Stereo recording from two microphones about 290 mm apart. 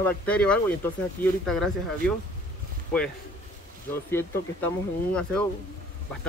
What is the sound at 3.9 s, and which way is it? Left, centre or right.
Speech, centre.